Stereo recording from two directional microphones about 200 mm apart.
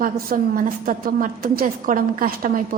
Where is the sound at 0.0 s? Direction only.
45° right (ahead or behind).